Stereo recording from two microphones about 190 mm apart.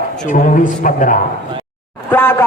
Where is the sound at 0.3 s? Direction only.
40° left (ahead or behind).